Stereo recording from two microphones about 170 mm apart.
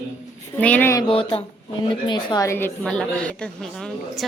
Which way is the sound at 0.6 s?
10° left (ahead or behind).